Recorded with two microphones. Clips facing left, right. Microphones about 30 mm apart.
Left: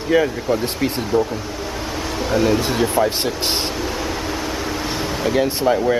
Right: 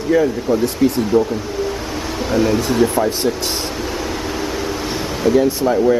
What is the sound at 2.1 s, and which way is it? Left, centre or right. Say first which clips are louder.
Speech: right 1 dB; centre.